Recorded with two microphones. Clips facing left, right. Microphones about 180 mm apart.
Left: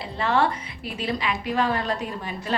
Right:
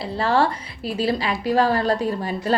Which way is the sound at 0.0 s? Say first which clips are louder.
Right 3 dB; 35° right (ahead or behind).